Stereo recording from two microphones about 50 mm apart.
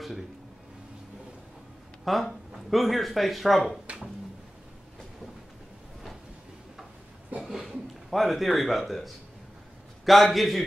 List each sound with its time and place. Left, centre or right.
2.0 s speech: centre
7.4 s a man's voice: centre